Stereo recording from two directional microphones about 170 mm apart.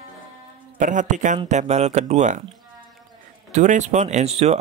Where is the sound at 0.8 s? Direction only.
50° right (ahead or behind).